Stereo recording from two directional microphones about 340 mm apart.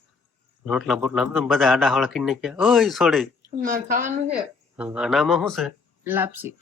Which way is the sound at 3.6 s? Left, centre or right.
Right.